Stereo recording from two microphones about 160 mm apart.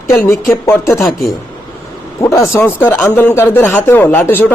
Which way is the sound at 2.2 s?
20° left (ahead or behind).